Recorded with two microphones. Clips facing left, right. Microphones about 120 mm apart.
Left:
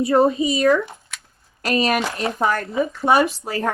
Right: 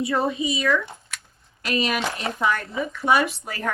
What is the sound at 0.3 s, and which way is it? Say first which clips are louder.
Speech: left 6 dB; 40° left (ahead or behind).